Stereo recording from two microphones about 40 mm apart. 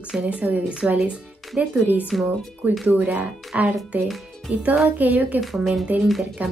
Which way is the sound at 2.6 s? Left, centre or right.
Right.